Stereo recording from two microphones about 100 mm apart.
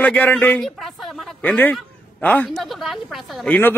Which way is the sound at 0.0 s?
15° left (ahead or behind).